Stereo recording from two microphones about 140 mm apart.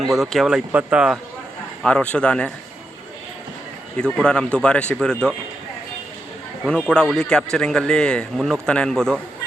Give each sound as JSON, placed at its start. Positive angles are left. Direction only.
{"t": 0.0, "sound": "a man's voice", "side_deg": 0}
{"t": 1.8, "sound": "speech", "side_deg": 10}
{"t": 3.9, "sound": "speech", "side_deg": 5}
{"t": 6.7, "sound": "a man's voice", "side_deg": 5}